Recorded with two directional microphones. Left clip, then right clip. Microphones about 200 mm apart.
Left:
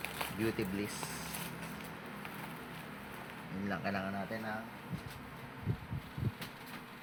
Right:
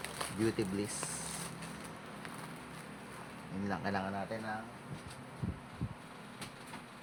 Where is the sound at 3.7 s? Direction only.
50° right (ahead or behind).